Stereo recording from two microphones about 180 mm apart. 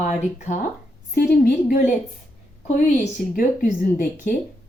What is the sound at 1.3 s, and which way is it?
A woman's voice, 50° left (ahead or behind).